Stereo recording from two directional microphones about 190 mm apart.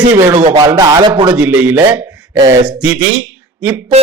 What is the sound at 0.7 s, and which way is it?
Speech, 20° right (ahead or behind).